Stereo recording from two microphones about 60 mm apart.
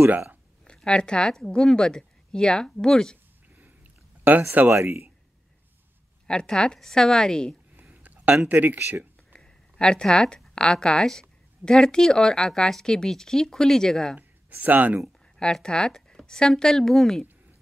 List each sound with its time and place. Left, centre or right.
0.7 s speech: centre
4.2 s speech: right
4.7 s speech: right
6.2 s speech: centre
7.9 s a sound: right
8.5 s speech: right
9.3 s a sound: centre
10.5 s speech: centre
14.5 s speech: right
15.5 s speech: centre